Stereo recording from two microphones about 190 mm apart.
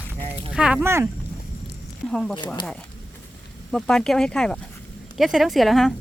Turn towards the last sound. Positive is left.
turn(degrees=0)  # may be behind; listen again after turning